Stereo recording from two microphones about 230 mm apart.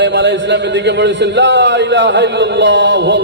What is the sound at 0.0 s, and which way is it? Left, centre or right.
A man's voice, right.